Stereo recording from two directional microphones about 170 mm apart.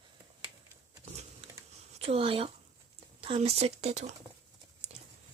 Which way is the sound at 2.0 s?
35° right (ahead or behind).